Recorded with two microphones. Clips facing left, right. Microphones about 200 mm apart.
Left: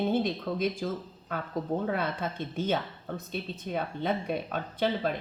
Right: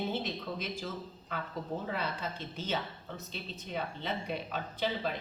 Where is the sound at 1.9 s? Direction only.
55° left (ahead or behind).